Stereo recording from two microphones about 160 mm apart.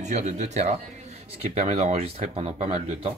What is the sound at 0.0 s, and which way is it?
Speech, 45° right (ahead or behind).